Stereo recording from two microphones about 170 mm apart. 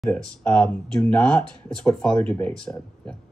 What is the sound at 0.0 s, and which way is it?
Speech, 10° left (ahead or behind).